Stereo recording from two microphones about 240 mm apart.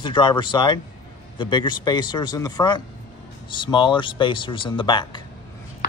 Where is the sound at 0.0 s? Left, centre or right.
Centre.